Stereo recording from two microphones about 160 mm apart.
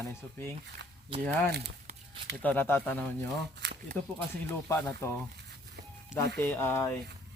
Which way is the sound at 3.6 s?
90° right.